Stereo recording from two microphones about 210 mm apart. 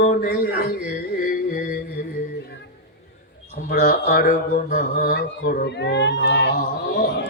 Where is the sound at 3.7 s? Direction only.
40° left (ahead or behind).